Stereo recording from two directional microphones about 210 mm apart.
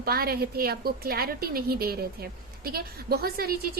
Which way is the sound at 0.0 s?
45° right (ahead or behind).